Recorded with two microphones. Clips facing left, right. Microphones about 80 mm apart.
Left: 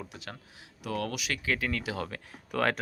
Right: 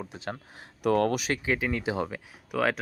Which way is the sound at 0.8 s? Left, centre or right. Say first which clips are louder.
Right 10 dB; right.